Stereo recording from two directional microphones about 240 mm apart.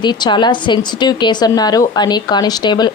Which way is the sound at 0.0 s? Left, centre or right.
Centre.